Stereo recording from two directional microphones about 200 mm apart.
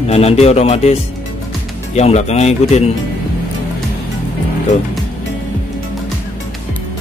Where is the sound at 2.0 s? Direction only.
30° left (ahead or behind).